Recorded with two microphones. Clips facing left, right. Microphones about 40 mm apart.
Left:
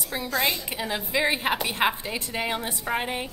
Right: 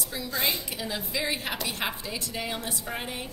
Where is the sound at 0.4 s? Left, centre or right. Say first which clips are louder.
Left 3 dB; left.